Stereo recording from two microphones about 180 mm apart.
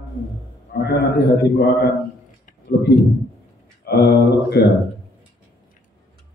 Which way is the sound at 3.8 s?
65° left (ahead or behind).